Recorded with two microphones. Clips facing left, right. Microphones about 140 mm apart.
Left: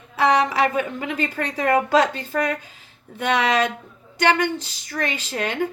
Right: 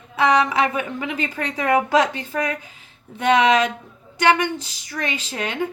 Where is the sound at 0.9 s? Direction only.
20° right (ahead or behind).